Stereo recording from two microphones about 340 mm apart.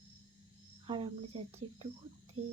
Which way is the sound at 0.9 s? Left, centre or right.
Centre.